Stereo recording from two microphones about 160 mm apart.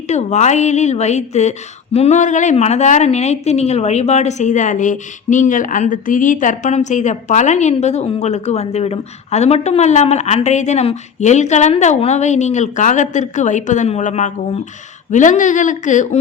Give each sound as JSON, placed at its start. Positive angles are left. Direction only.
{"t": 0.1, "sound": "a woman's voice", "side_deg": 45}